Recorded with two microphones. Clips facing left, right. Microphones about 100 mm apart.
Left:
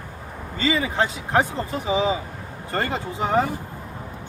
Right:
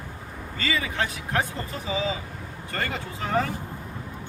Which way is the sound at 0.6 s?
25° left (ahead or behind).